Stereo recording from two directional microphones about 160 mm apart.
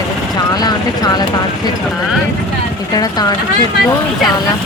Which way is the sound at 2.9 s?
25° left (ahead or behind).